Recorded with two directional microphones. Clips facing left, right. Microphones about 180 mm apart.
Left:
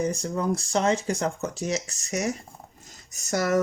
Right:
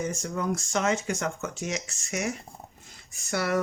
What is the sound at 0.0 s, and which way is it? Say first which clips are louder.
Speech: left 4 dB; 35° left (ahead or behind).